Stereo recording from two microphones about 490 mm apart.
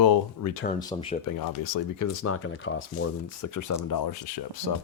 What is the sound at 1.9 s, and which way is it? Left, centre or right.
Speech, left.